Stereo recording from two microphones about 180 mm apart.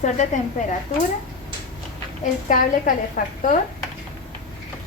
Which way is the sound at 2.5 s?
50° left (ahead or behind).